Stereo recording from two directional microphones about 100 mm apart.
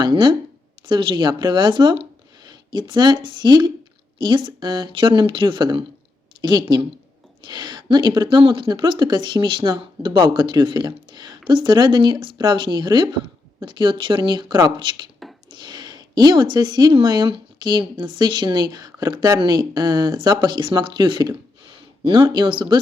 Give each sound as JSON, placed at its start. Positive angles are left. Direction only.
{"t": 0.0, "sound": "a woman's voice", "side_deg": -50}
{"t": 19.4, "sound": "a woman's voice", "side_deg": -50}